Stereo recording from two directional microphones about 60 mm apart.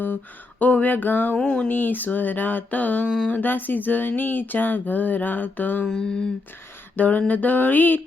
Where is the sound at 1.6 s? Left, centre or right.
Left.